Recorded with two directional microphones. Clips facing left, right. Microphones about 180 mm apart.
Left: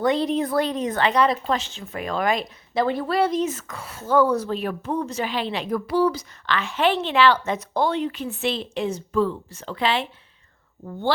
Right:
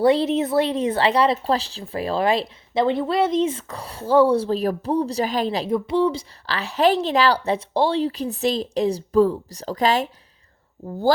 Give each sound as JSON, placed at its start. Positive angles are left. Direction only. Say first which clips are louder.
{"t": 0.0, "sound": "speech", "louder": "right 4 dB", "side_deg": -30}
{"t": 5.7, "sound": "speech", "louder": "even", "side_deg": -25}